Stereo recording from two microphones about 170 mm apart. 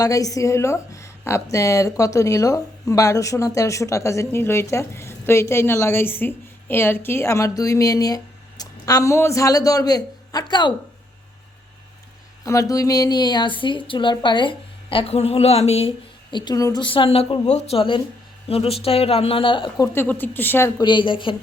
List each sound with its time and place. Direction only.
0.0 s a woman's voice: 20° left (ahead or behind)
12.5 s a woman's voice: 20° left (ahead or behind); by 15.9 s 35° left (ahead or behind)
16.3 s a woman's voice: 25° left (ahead or behind)
20.8 s a woman's voice: 30° left (ahead or behind)